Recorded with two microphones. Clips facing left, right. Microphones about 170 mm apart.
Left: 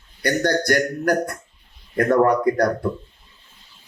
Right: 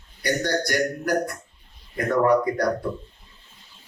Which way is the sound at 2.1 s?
50° left (ahead or behind).